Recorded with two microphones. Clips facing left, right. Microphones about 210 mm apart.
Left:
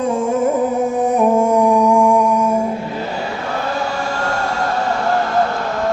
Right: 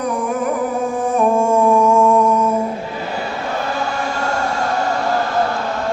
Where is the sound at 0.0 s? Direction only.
25° left (ahead or behind).